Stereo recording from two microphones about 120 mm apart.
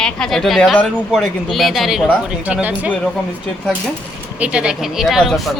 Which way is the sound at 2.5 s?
10° right (ahead or behind).